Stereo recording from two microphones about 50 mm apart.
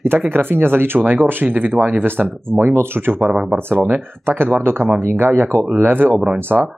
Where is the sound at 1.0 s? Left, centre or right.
Right.